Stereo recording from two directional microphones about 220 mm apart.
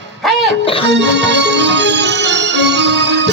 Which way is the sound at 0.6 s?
25° left (ahead or behind).